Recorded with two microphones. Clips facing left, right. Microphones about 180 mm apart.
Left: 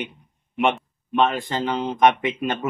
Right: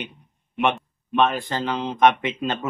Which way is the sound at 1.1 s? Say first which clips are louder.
Even; 20° left (ahead or behind).